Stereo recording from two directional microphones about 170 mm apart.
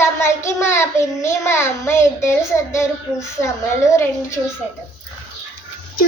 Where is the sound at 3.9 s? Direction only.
15° left (ahead or behind).